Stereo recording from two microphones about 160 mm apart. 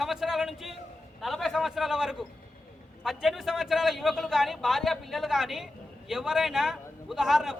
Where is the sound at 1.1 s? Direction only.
Centre (ahead or behind).